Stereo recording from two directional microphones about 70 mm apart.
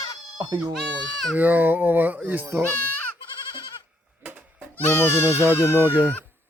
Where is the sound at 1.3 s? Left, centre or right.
Right.